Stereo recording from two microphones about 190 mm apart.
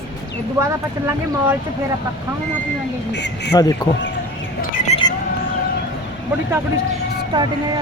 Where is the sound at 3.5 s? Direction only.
20° left (ahead or behind).